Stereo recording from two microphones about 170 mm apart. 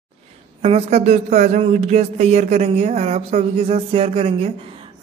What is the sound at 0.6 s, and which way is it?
Speech, 40° right (ahead or behind).